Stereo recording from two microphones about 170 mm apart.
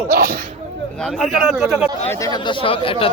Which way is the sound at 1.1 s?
Centre (ahead or behind).